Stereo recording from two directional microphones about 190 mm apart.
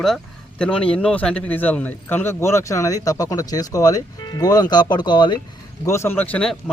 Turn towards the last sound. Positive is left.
turn(degrees=5)  # may be behind; listen again after turning